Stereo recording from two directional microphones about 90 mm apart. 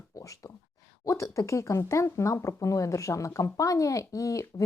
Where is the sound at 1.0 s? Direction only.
35° left (ahead or behind).